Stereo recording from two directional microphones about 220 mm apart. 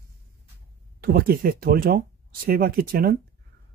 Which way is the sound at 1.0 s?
45° right (ahead or behind).